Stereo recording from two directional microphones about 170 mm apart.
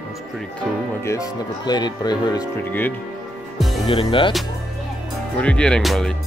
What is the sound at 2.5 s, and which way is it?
Speech, 10° left (ahead or behind).